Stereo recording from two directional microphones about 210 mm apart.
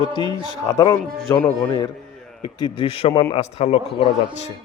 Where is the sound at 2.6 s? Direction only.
20° left (ahead or behind).